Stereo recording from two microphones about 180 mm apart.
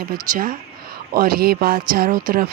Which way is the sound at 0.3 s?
50° right (ahead or behind).